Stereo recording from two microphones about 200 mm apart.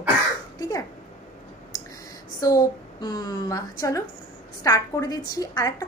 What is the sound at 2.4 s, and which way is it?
A woman's voice, 20° left (ahead or behind).